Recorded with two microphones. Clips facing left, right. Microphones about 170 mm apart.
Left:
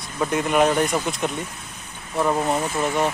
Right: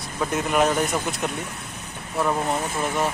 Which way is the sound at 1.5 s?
65° right (ahead or behind).